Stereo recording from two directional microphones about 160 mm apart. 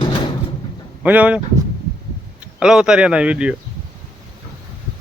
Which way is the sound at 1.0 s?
10° right (ahead or behind).